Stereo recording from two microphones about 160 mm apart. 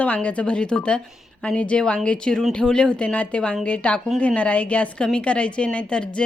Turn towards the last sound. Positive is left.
turn(degrees=5)  # may be behind; listen again after turning